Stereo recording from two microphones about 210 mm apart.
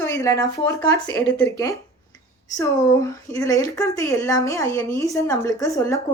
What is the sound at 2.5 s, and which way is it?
A woman's voice, 15° left (ahead or behind).